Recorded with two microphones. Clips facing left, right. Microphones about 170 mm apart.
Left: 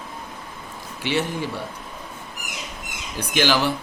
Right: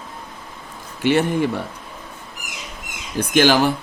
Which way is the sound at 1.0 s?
50° right (ahead or behind).